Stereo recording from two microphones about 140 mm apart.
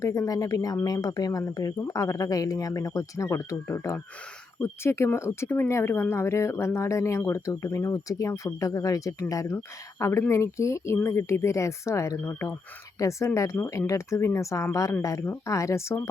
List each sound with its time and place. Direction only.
0.0 s speech: 20° left (ahead or behind)